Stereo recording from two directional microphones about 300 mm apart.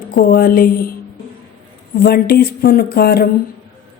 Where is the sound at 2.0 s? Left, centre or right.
Left.